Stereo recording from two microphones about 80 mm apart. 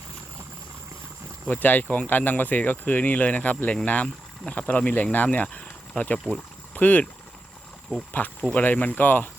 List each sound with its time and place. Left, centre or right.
1.5 s speech: left
8.4 s speech: centre